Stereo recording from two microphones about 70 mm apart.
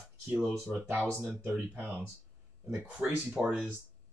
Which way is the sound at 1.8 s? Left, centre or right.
Right.